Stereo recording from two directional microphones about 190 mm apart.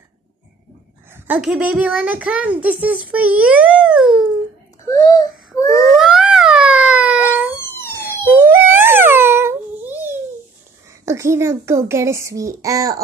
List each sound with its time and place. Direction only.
1.1 s a child's voice: 10° right (ahead or behind)
4.8 s baby cry: 20° left (ahead or behind)
5.9 s a sound: 5° right (ahead or behind)
7.7 s police car: 10° left (ahead or behind)
8.3 s a sound: 10° right (ahead or behind)
11.1 s a child's voice: 15° right (ahead or behind)